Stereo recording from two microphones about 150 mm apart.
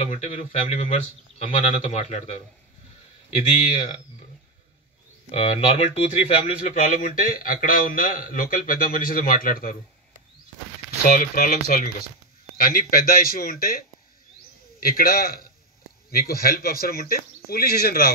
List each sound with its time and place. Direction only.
0.1 s a man's voice: 55° left (ahead or behind)
5.3 s speech: 45° left (ahead or behind)
6.7 s speech: 60° left (ahead or behind)
11.1 s speech: 75° left (ahead or behind)
14.8 s a man's voice: 80° left